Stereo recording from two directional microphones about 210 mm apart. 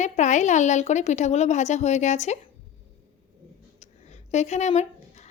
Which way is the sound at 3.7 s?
35° left (ahead or behind).